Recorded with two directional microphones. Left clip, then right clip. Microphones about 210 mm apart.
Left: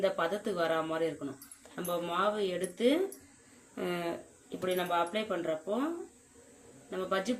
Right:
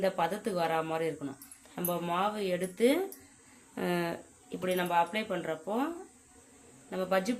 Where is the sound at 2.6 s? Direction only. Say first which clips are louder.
Right 2 dB; 45° right (ahead or behind).